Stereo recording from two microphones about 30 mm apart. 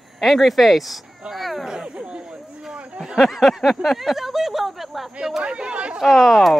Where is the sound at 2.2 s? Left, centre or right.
Centre.